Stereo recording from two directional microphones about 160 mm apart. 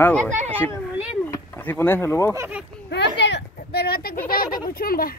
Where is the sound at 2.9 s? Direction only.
90° left; by 4.4 s 65° left (ahead or behind).